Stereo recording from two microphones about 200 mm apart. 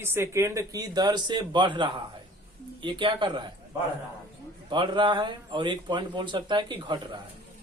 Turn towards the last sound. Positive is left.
turn(degrees=-20)  # may be behind; listen again after turning